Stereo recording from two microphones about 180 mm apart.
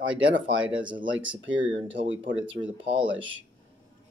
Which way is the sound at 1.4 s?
90° right.